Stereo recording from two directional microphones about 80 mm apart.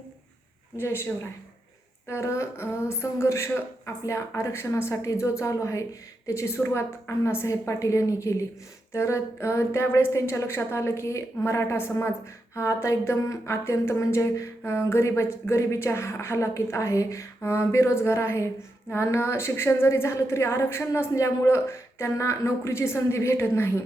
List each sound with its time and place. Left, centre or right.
0.8 s speech: left